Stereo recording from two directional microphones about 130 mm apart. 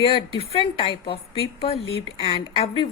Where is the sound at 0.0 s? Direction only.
45° left (ahead or behind).